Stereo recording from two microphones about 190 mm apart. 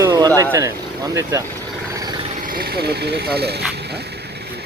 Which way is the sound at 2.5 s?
50° right (ahead or behind).